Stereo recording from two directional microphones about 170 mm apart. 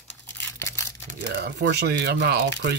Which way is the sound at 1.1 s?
65° right (ahead or behind).